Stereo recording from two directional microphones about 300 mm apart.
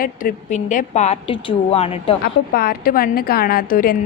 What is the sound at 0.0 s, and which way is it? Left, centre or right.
A woman's voice, left.